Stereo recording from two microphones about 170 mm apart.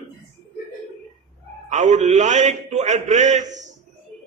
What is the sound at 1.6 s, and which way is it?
A man's voice, 45° right (ahead or behind).